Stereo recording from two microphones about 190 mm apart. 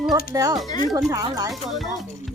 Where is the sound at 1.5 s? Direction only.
Centre (ahead or behind).